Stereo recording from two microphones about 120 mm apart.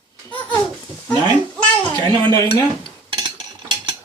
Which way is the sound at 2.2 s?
25° left (ahead or behind).